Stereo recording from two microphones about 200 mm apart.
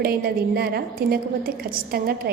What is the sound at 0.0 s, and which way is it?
A woman's voice, 50° right (ahead or behind).